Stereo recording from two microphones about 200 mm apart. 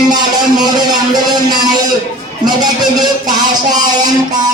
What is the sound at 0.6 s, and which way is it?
Music, 20° right (ahead or behind).